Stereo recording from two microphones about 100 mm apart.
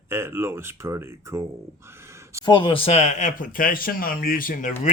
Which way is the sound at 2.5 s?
60° left (ahead or behind).